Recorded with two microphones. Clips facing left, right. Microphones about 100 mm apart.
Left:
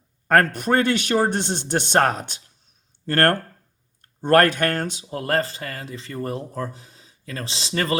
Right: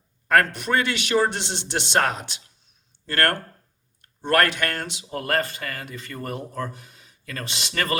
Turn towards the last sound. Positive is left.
turn(degrees=25)  # may be behind; listen again after turning